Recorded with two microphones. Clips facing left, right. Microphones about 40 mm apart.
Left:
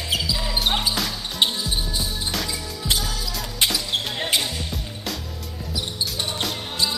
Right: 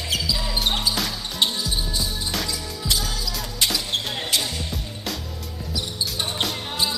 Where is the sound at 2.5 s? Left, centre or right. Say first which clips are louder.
Left 1 dB; centre.